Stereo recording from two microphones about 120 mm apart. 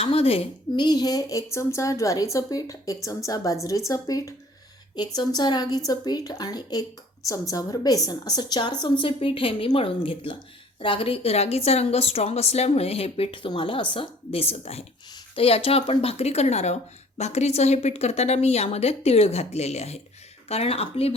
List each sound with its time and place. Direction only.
0.0 s a woman's voice: 55° left (ahead or behind)
0.8 s a woman's voice: 35° left (ahead or behind); by 21.2 s 55° left (ahead or behind)